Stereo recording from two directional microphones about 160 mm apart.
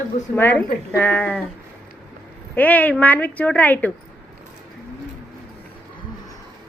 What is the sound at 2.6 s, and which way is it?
A woman's voice, 10° left (ahead or behind).